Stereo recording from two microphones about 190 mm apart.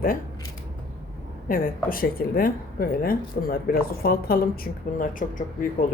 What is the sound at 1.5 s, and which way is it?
Speech, 50° left (ahead or behind).